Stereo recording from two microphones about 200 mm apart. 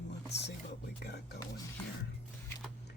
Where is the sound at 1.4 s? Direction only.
20° left (ahead or behind).